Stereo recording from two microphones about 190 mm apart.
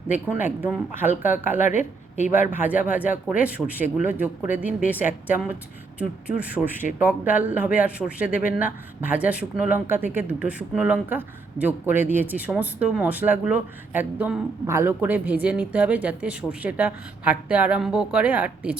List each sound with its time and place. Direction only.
0.3 s speech: 10° right (ahead or behind)
1.8 s a woman's voice: 40° left (ahead or behind)
2.5 s speech: 10° right (ahead or behind)